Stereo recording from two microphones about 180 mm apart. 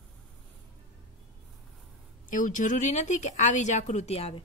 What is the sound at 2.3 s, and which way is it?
Speech, 45° left (ahead or behind).